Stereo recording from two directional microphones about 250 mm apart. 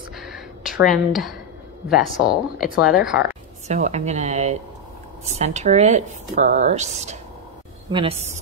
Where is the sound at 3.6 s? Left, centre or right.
Right.